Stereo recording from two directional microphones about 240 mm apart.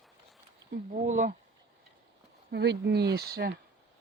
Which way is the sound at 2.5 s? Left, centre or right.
Right.